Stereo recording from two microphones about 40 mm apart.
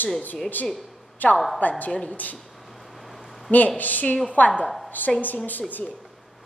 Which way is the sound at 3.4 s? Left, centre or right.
Left.